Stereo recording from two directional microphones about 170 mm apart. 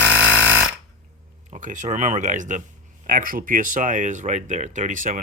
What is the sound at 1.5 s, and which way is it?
Speech, 50° right (ahead or behind).